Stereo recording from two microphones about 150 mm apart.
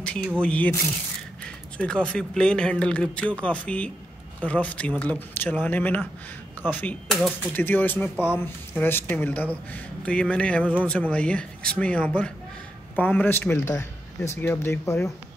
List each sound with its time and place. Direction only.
0.4 s speech: 10° left (ahead or behind)